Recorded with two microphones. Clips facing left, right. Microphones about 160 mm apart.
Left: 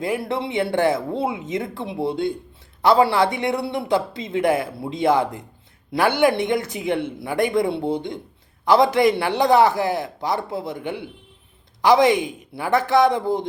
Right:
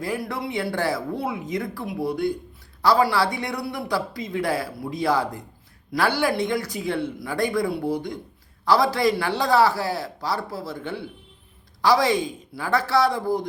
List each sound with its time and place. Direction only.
0.0 s speech: 20° left (ahead or behind)